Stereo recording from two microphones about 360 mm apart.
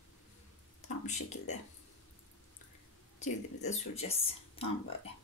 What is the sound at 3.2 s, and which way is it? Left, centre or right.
Speech, centre.